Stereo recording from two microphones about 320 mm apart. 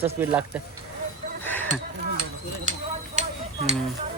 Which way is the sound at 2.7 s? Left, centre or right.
Right.